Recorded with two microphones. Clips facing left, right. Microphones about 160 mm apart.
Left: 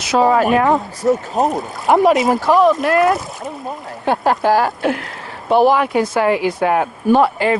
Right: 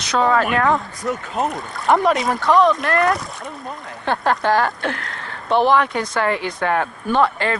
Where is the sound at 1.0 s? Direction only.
40° left (ahead or behind).